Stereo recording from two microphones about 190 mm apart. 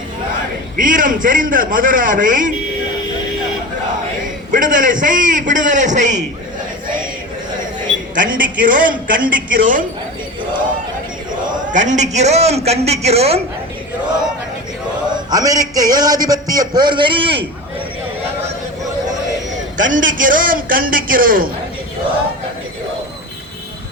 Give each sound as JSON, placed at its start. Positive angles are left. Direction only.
{"t": 0.8, "sound": "a man's voice", "side_deg": -45}
{"t": 4.5, "sound": "a man's voice", "side_deg": -45}
{"t": 8.1, "sound": "a man's voice", "side_deg": -45}
{"t": 11.7, "sound": "a man's voice", "side_deg": -40}
{"t": 15.1, "sound": "a sound", "side_deg": -20}
{"t": 15.7, "sound": "a man's voice", "side_deg": -20}
{"t": 19.7, "sound": "a man's voice", "side_deg": -45}